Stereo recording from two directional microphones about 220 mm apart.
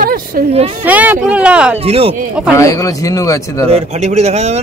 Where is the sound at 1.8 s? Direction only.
25° right (ahead or behind).